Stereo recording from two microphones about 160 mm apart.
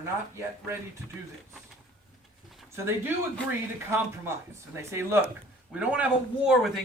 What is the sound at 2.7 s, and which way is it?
Speech, 15° right (ahead or behind).